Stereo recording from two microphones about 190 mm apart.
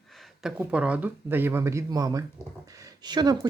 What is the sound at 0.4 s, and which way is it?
Speech, 5° right (ahead or behind).